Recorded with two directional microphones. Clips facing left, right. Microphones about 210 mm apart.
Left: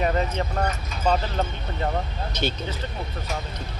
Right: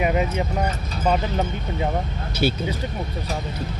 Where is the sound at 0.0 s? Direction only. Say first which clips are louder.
Right 2 dB; 10° right (ahead or behind).